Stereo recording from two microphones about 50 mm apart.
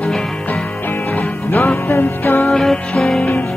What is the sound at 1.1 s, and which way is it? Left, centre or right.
Music, left.